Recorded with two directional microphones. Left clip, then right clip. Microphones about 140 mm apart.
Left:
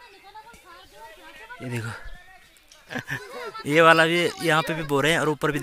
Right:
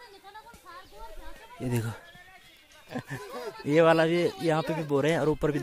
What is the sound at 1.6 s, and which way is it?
Speech, 35° right (ahead or behind).